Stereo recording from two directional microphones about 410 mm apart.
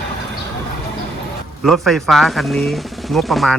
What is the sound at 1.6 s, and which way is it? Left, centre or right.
Speech, centre.